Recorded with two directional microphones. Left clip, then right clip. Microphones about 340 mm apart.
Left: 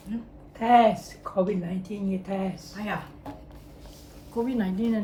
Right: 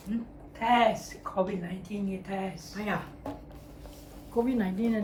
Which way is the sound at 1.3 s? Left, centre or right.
Centre.